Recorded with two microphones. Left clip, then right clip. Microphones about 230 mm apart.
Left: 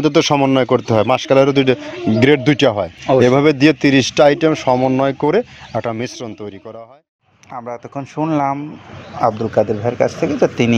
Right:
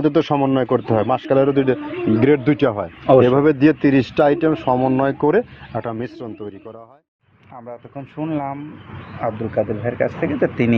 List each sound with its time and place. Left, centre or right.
0.0 s speech: left
7.5 s speech: left
9.2 s speech: centre